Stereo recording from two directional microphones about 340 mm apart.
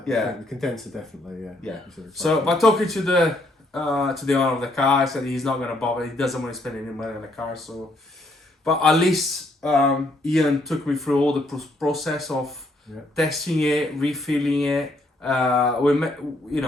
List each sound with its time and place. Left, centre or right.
0.0 s speech: centre